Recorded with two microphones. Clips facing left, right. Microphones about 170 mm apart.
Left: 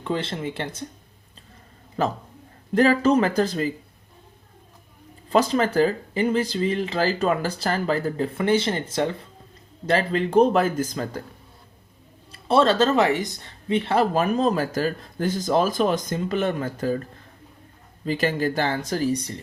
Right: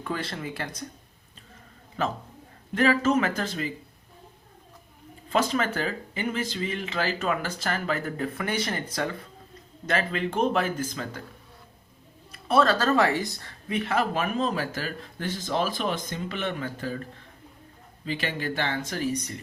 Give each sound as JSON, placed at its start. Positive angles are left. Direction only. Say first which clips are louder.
{"t": 0.0, "sound": "speech", "louder": "left 5 dB", "side_deg": 25}
{"t": 2.0, "sound": "speech", "louder": "left 4 dB", "side_deg": 35}
{"t": 5.3, "sound": "speech", "louder": "left 5 dB", "side_deg": 35}
{"t": 12.3, "sound": "speech", "louder": "left 3 dB", "side_deg": 30}
{"t": 18.0, "sound": "speech", "louder": "left 7 dB", "side_deg": 40}